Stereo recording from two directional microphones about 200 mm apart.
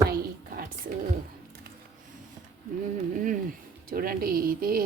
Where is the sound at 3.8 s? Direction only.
45° right (ahead or behind).